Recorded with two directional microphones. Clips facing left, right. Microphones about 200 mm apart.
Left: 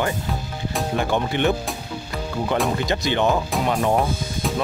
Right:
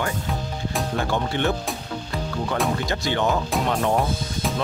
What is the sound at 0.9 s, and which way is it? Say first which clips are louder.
Speech: left 3 dB; 15° left (ahead or behind).